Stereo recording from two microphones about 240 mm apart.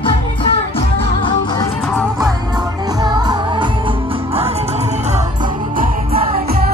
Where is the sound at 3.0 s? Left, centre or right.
Centre.